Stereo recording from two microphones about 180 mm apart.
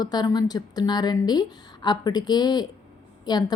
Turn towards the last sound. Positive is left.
turn(degrees=20)  # may be behind; listen again after turning